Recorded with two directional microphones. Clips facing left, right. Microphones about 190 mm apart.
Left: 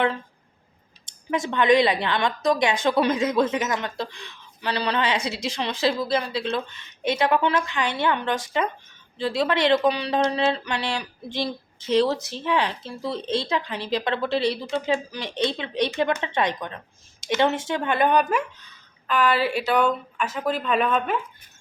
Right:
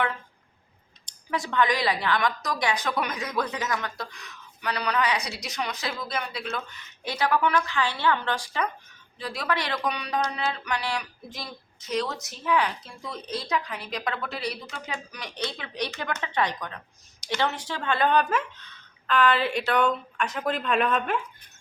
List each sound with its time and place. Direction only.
1.3 s a woman's voice: 20° left (ahead or behind); by 21.2 s centre (ahead or behind)